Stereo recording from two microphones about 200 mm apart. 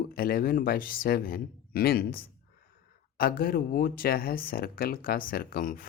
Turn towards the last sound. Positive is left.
turn(degrees=45)  # may be behind; listen again after turning